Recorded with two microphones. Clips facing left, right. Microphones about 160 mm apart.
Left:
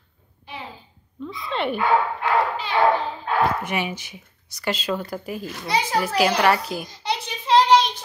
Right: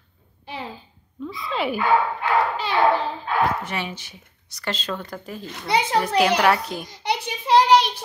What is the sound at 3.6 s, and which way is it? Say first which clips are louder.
Speech: left 3 dB; 15° left (ahead or behind).